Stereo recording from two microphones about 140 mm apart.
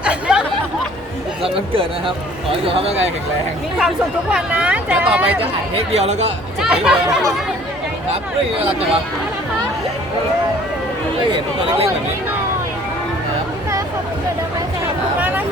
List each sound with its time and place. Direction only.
0.0 s a sound: 5° right (ahead or behind)
1.4 s speech: 40° right (ahead or behind)
3.8 s speech: 5° right (ahead or behind)
5.7 s speech: 50° right (ahead or behind)
6.6 s speech: 5° right (ahead or behind)
11.3 s speech: 40° right (ahead or behind)
15.2 s a sound: 15° right (ahead or behind)